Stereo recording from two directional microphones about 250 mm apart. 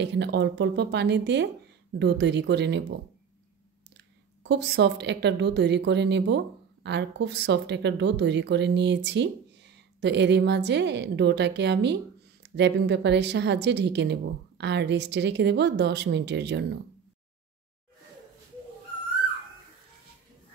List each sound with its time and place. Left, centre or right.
0.0 s a woman's voice: right
3.9 s a woman's voice: right